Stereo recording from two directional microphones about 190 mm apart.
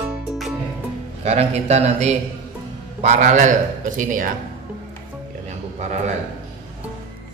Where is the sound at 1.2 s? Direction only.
35° right (ahead or behind).